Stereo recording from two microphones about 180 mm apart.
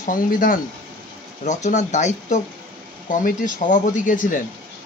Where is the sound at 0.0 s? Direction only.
50° left (ahead or behind).